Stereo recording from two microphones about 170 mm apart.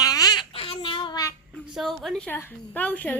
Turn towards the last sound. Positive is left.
turn(degrees=10)  # may be behind; listen again after turning